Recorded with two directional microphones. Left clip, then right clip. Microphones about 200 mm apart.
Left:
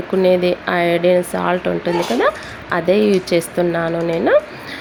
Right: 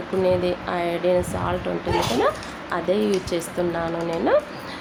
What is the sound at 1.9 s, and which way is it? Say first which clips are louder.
Speech: left 2 dB; centre (ahead or behind).